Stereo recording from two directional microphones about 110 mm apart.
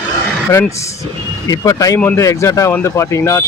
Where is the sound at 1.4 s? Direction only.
35° left (ahead or behind).